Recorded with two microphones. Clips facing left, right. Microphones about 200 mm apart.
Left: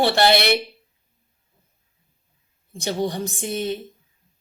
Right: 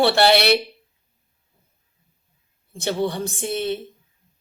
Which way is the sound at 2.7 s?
15° left (ahead or behind).